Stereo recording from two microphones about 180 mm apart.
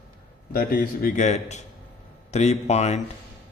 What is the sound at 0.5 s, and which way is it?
A man's voice, 50° left (ahead or behind).